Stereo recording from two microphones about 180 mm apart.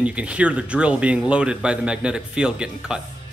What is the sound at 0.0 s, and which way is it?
A man's voice, 5° right (ahead or behind).